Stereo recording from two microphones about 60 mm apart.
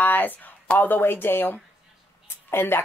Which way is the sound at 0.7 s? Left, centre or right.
Left.